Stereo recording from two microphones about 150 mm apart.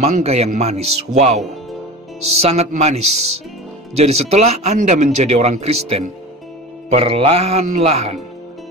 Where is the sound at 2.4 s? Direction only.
45° right (ahead or behind).